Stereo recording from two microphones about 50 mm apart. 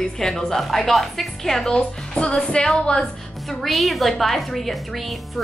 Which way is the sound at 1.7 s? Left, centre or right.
Left.